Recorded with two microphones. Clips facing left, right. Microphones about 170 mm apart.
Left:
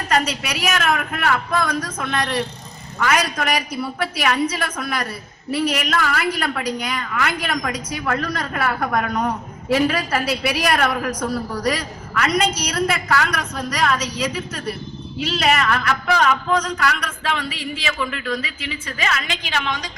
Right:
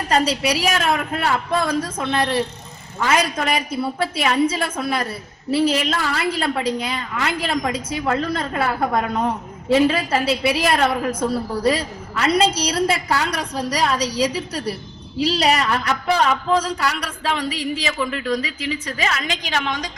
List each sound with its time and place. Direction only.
0.1 s a woman's voice: 30° right (ahead or behind)